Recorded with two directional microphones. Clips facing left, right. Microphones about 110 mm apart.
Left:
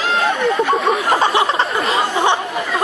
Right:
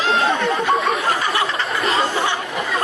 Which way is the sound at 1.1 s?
25° left (ahead or behind).